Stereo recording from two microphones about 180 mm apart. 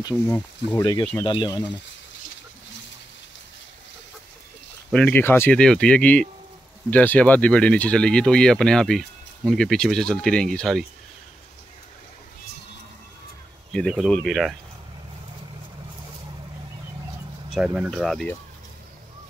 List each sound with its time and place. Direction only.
0.0 s speech: 15° left (ahead or behind)
4.9 s speech: 10° left (ahead or behind)
13.7 s speech: centre (ahead or behind)
17.6 s speech: 5° right (ahead or behind)